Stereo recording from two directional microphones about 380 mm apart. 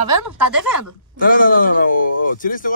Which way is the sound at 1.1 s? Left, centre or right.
Left.